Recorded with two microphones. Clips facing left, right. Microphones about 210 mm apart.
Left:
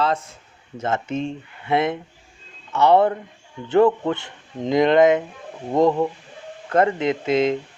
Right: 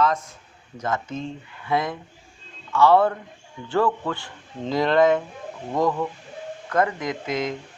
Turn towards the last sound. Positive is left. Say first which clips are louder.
# left 7 dB
turn(degrees=25)  # may be behind; listen again after turning